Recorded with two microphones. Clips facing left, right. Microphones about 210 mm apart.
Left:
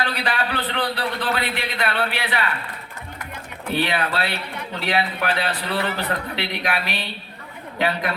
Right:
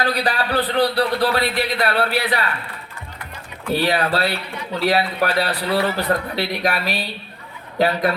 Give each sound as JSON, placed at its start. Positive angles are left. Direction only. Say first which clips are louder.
{"t": 0.0, "sound": "a man's voice", "louder": "right 4 dB", "side_deg": -35}
{"t": 3.8, "sound": "a man's voice", "louder": "right 3 dB", "side_deg": -40}